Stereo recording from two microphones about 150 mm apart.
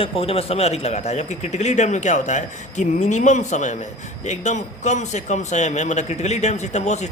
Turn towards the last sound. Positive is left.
turn(degrees=50)  # may be behind; listen again after turning